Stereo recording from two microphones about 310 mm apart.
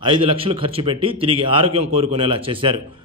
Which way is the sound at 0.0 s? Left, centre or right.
Centre.